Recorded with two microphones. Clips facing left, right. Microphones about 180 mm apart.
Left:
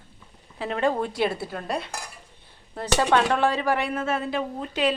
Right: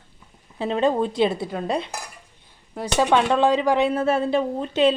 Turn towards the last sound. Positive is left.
turn(degrees=-25)  # may be behind; listen again after turning